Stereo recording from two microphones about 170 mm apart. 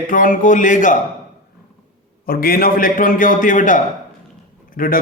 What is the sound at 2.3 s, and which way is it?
A man's voice, 60° left (ahead or behind).